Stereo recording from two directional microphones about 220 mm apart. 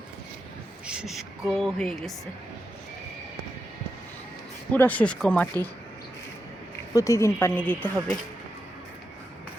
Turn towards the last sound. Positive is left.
turn(degrees=10)  # may be behind; listen again after turning